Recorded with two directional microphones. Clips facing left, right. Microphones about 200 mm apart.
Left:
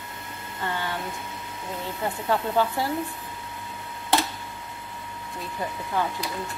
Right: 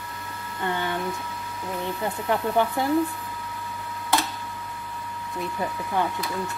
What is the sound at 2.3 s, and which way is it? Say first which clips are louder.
Speech: right 1 dB; 20° right (ahead or behind).